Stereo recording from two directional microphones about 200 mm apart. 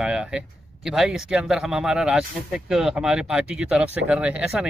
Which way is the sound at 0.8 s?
Centre (ahead or behind).